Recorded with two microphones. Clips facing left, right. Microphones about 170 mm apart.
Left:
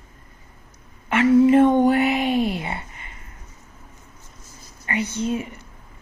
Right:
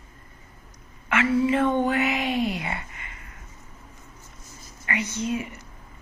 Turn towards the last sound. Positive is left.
turn(degrees=30)  # may be behind; listen again after turning